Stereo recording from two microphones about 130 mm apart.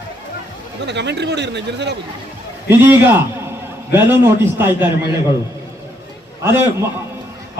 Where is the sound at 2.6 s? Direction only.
15° right (ahead or behind).